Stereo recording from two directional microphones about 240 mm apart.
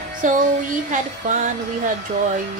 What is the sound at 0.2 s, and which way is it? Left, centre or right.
Speech, right.